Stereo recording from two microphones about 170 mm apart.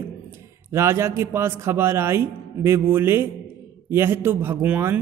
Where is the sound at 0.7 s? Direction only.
15° right (ahead or behind).